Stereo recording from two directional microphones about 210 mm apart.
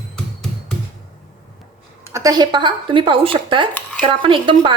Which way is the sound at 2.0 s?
15° right (ahead or behind).